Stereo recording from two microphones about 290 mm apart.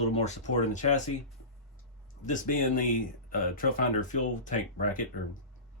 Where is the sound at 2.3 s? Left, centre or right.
Left.